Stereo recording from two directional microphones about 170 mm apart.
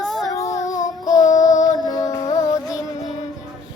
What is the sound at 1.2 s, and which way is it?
Child singing, 45° left (ahead or behind).